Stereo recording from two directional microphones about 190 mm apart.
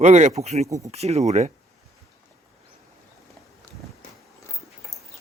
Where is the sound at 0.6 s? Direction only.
15° right (ahead or behind).